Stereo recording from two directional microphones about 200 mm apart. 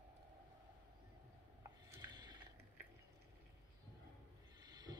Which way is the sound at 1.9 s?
20° right (ahead or behind).